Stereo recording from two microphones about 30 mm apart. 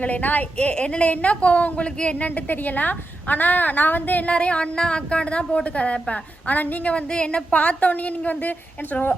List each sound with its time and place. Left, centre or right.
0.0 s a woman's voice: left
0.7 s a woman's voice: left
0.9 s a woman's voice: left
4.3 s a woman's voice: left
6.5 s a woman's voice: left
6.9 s a woman's voice: left
7.5 s a woman's voice: left